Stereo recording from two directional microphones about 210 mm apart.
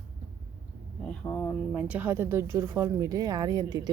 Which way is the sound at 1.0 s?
5° left (ahead or behind).